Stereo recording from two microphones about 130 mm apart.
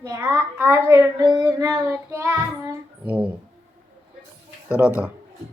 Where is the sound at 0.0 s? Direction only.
25° right (ahead or behind).